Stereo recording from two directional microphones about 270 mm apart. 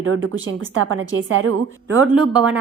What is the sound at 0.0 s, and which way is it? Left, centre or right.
A woman's voice, right.